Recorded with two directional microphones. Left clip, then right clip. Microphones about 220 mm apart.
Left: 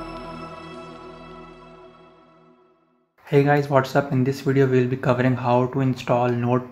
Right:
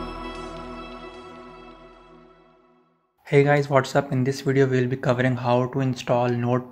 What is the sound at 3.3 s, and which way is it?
Speech, 25° right (ahead or behind).